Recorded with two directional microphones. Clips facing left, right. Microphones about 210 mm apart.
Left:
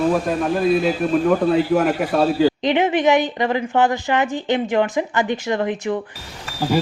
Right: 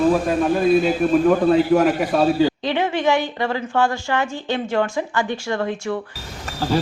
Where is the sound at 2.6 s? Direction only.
20° left (ahead or behind).